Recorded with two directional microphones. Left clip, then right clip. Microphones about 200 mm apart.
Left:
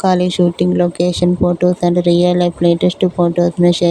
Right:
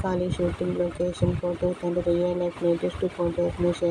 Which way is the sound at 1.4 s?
40° left (ahead or behind).